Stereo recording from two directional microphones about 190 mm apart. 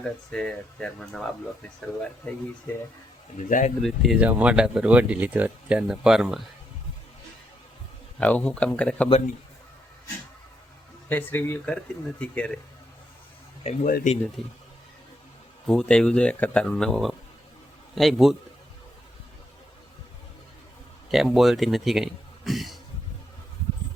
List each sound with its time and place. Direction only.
0.0 s speech: 5° left (ahead or behind)
3.3 s speech: 40° left (ahead or behind)
3.8 s speech: centre (ahead or behind)
8.2 s speech: 5° left (ahead or behind)
11.1 s speech: 10° left (ahead or behind)
13.7 s speech: 45° left (ahead or behind)
14.4 s speech: centre (ahead or behind)
15.6 s speech: 5° left (ahead or behind)
21.1 s speech: centre (ahead or behind)